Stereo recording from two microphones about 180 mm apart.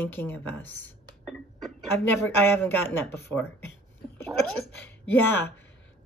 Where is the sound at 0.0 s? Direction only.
10° left (ahead or behind).